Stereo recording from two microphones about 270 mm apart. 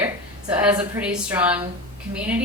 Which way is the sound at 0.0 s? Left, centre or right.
Centre.